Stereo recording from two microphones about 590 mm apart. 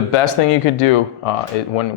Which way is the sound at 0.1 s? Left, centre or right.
Left.